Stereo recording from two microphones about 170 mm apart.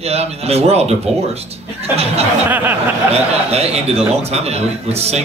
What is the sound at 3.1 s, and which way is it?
A man's voice, 35° right (ahead or behind).